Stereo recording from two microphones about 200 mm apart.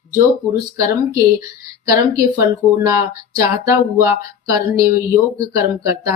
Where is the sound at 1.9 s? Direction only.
15° right (ahead or behind).